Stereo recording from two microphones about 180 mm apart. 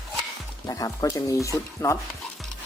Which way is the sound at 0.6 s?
20° left (ahead or behind).